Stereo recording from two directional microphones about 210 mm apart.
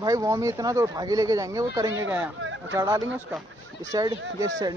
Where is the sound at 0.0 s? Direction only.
15° right (ahead or behind).